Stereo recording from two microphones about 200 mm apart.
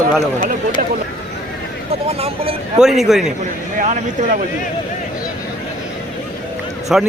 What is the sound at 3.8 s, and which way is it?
Speech, 40° right (ahead or behind).